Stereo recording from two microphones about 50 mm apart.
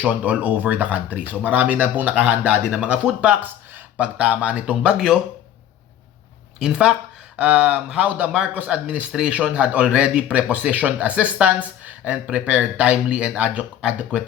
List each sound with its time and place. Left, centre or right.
0.0 s speech: right
3.4 s a sound: right
3.9 s speech: right
6.6 s speech: centre